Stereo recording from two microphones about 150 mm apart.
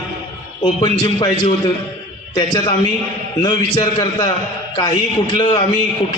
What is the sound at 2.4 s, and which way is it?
Speech, 30° left (ahead or behind).